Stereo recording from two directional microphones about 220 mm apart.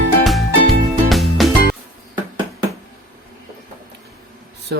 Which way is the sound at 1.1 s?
Centre (ahead or behind).